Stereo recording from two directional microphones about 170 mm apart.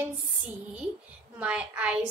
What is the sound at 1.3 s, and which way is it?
Speech, 5° right (ahead or behind).